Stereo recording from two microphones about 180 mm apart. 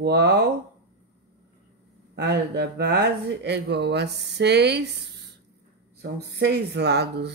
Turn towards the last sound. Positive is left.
turn(degrees=-65)  # may be behind; listen again after turning